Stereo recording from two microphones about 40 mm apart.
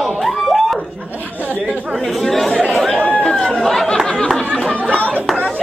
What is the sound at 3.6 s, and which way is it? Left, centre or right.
Speech, centre.